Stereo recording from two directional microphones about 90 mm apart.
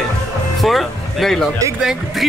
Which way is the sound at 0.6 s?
Centre (ahead or behind).